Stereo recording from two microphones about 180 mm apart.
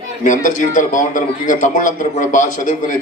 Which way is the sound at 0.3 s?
45° left (ahead or behind).